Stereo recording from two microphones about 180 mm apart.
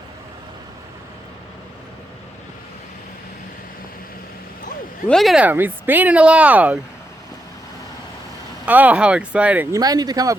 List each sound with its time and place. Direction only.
5.0 s speech: centre (ahead or behind)
8.6 s speech: 10° right (ahead or behind)
9.7 s speech: 20° right (ahead or behind)